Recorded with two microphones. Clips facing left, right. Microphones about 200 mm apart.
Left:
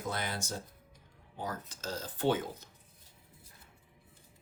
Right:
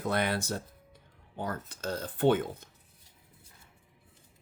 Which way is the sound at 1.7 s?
55° right (ahead or behind).